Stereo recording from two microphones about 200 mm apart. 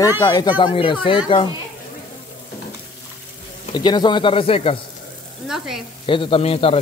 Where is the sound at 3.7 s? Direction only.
20° left (ahead or behind).